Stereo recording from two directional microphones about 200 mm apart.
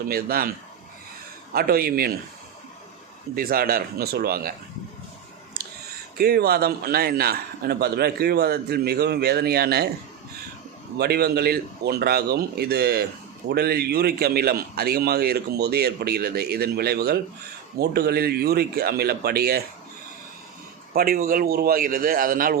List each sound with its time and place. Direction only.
0.1 s a man's voice: 50° right (ahead or behind)
1.5 s a man's voice: 50° right (ahead or behind)
3.3 s a man's voice: 45° right (ahead or behind)
6.1 s a man's voice: 50° right (ahead or behind)
10.9 s a man's voice: 50° right (ahead or behind)
20.9 s a man's voice: 45° right (ahead or behind)